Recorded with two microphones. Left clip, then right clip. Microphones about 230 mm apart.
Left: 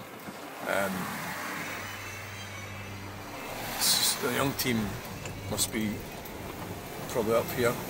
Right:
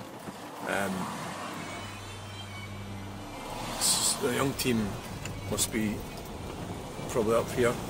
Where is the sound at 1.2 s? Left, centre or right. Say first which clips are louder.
Left 2 dB; left.